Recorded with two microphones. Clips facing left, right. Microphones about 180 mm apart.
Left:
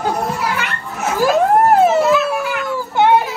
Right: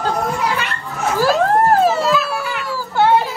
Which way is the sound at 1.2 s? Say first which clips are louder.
Left 2 dB; 20° left (ahead or behind).